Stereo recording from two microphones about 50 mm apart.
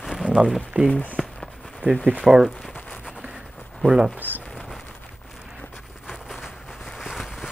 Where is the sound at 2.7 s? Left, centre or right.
Left.